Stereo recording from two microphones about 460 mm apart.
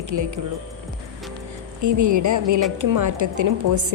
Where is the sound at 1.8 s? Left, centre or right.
Right.